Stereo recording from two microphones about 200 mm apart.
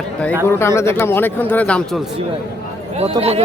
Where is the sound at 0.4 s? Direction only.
15° left (ahead or behind).